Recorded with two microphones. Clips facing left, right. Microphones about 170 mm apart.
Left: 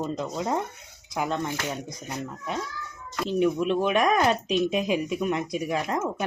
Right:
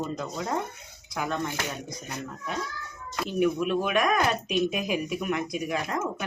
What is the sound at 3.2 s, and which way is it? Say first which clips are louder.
Speech: left 2 dB; 25° left (ahead or behind).